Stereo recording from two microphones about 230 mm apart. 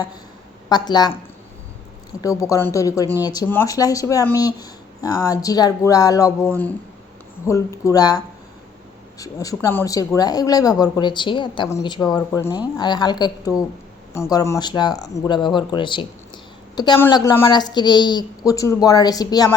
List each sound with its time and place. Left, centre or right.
0.7 s speech: centre
2.2 s speech: centre